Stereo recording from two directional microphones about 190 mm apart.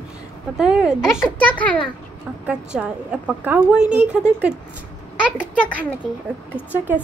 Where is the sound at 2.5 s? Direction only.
5° right (ahead or behind).